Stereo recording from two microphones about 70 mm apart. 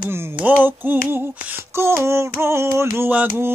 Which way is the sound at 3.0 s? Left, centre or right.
Right.